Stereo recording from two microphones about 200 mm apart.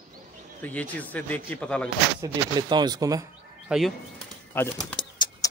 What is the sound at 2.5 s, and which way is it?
Speech, 20° right (ahead or behind).